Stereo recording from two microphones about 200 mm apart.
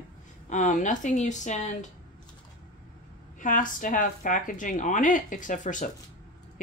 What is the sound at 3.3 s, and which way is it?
Speech, 40° left (ahead or behind).